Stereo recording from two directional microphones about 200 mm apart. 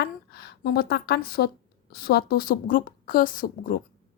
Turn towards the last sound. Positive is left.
turn(degrees=45)  # may be behind; listen again after turning